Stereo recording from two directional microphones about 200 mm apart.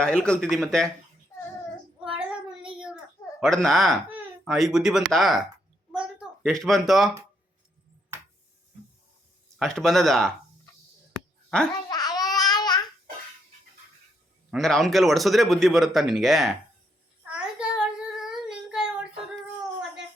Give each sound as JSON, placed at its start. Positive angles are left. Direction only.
{"t": 0.0, "sound": "speech", "side_deg": 5}
{"t": 2.0, "sound": "child singing", "side_deg": -5}
{"t": 3.4, "sound": "speech", "side_deg": 0}
{"t": 6.0, "sound": "a sound", "side_deg": 0}
{"t": 9.6, "sound": "speech", "side_deg": 0}
{"t": 11.9, "sound": "babbling", "side_deg": 20}
{"t": 14.5, "sound": "speech", "side_deg": 0}
{"t": 17.2, "sound": "child singing", "side_deg": -5}